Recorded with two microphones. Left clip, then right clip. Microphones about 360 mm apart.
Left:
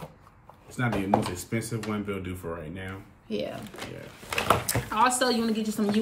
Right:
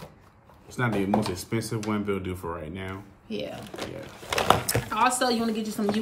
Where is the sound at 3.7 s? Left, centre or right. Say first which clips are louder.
Right 3 dB; centre.